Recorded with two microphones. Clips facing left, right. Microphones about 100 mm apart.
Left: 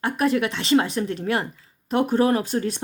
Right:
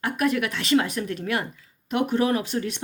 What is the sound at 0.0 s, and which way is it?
Speech, 30° left (ahead or behind).